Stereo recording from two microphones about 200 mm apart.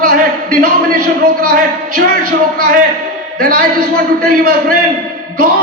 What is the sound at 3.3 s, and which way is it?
A man's voice, 45° right (ahead or behind).